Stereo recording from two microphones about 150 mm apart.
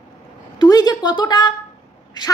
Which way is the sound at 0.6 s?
25° left (ahead or behind).